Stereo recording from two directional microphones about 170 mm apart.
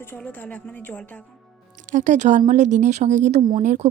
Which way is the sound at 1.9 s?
45° right (ahead or behind).